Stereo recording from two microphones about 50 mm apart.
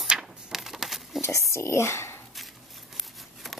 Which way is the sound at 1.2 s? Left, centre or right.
Left.